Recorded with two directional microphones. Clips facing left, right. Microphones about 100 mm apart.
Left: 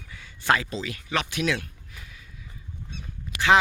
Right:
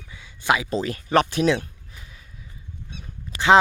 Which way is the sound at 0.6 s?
40° right (ahead or behind).